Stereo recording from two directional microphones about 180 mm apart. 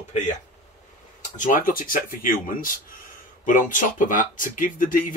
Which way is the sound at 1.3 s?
45° left (ahead or behind).